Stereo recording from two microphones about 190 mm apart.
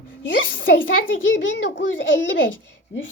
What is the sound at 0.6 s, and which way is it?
Speech, 50° left (ahead or behind).